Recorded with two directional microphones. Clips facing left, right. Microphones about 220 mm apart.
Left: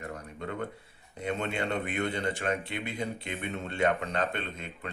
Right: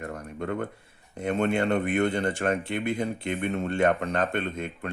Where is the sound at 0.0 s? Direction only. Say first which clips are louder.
Right 5 dB; 50° right (ahead or behind).